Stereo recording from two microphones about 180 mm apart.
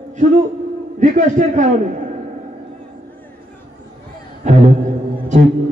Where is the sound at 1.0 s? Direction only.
40° right (ahead or behind).